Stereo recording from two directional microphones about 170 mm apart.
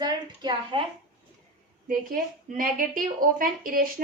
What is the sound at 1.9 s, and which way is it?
A woman's voice, 55° right (ahead or behind).